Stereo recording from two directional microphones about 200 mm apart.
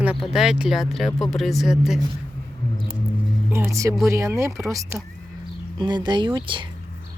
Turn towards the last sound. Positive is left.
turn(degrees=-25)  # may be behind; listen again after turning